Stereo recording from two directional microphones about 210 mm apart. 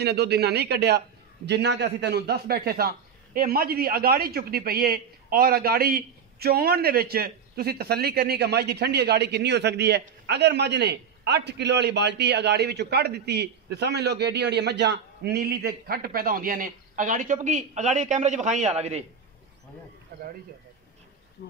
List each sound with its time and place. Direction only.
0.0 s a man's voice: 50° right (ahead or behind); by 19.0 s 30° right (ahead or behind)